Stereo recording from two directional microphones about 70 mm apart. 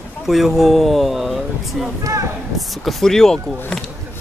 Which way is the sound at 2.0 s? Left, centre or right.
Right.